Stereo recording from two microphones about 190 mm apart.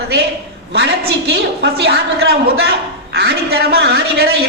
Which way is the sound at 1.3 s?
60° right (ahead or behind).